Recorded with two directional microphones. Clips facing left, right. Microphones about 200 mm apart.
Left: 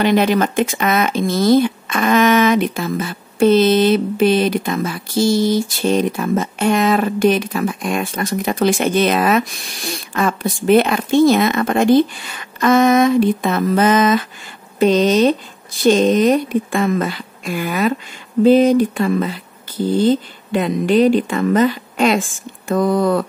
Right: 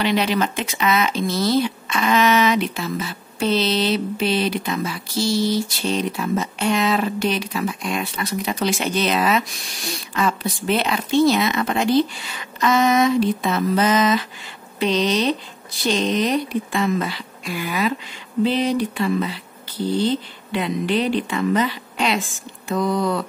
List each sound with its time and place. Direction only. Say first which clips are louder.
0.0 s speech: left 5 dB; 50° left (ahead or behind)